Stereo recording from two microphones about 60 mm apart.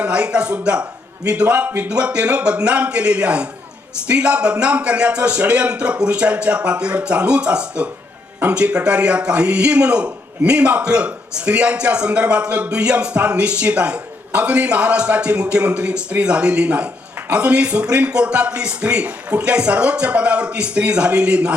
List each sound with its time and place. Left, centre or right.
0.0 s a man's voice: centre